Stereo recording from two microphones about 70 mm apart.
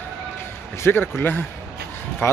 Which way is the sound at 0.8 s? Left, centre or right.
Left.